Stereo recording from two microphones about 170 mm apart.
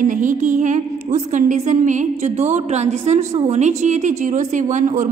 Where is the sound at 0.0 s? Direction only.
50° right (ahead or behind).